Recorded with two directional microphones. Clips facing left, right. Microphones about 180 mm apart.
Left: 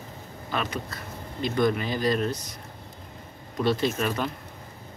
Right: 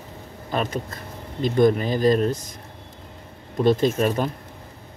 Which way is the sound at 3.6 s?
45° right (ahead or behind).